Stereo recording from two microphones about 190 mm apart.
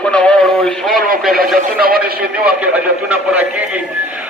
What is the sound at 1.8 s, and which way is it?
Speech, 50° right (ahead or behind).